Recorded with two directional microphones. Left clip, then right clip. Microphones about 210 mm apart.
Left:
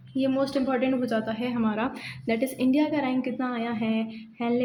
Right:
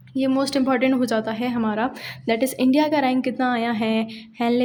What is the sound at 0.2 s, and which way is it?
Speech, 45° right (ahead or behind).